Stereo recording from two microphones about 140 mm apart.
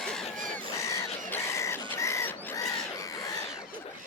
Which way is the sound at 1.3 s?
20° left (ahead or behind).